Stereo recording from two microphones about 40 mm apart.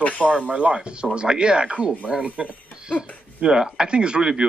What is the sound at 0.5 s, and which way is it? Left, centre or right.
Speech, right.